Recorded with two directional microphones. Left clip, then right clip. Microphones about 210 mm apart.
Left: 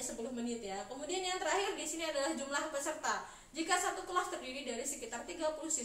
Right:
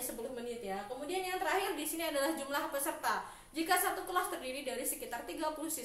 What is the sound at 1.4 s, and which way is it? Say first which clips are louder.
A woman's voice: right 2 dB; 25° right (ahead or behind).